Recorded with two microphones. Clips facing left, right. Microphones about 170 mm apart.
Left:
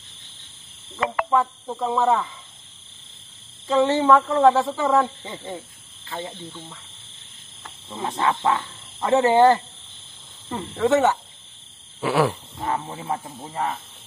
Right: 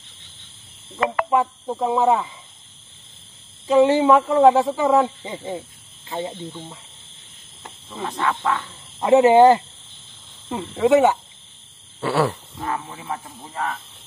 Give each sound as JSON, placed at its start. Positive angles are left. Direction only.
{"t": 1.3, "sound": "speech", "side_deg": -20}
{"t": 3.6, "sound": "speech", "side_deg": -15}
{"t": 8.1, "sound": "speech", "side_deg": 25}
{"t": 9.0, "sound": "speech", "side_deg": -20}
{"t": 12.0, "sound": "frog", "side_deg": 0}
{"t": 12.5, "sound": "speech", "side_deg": 25}